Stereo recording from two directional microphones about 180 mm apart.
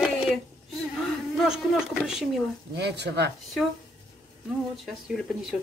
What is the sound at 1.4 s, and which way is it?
Speech, centre (ahead or behind).